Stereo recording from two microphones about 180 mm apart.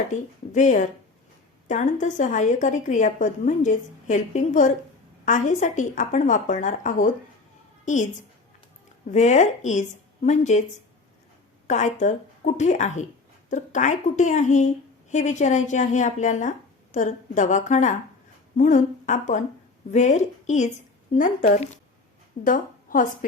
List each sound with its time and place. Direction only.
0.1 s a woman's voice: 40° left (ahead or behind)
9.0 s speech: 40° left (ahead or behind)
11.7 s a woman's voice: 40° left (ahead or behind)